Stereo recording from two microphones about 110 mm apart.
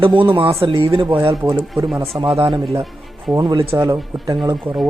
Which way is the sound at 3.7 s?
25° right (ahead or behind).